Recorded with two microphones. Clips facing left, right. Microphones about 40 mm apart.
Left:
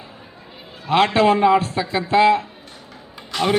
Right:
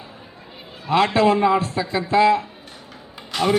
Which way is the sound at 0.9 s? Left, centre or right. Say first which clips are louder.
Left 1 dB; left.